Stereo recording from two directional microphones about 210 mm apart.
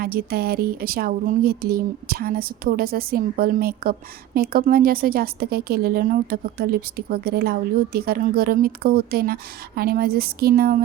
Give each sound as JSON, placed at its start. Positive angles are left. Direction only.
{"t": 0.0, "sound": "a woman's voice", "side_deg": -45}